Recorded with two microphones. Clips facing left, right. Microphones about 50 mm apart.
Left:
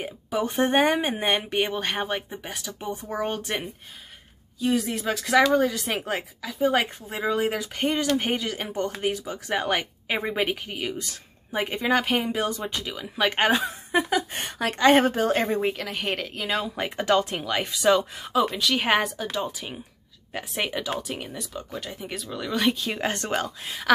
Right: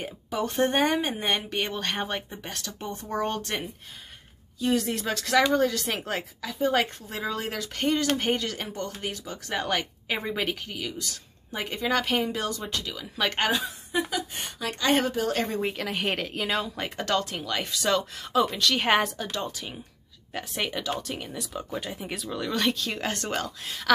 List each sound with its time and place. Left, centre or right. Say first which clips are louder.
0.0 s speech: left 3 dB; centre
13.7 s a woman's voice: left 5 dB; left
15.7 s speech: even; centre
16.7 s speech: left 5 dB; centre
21.5 s speech: right 2 dB; centre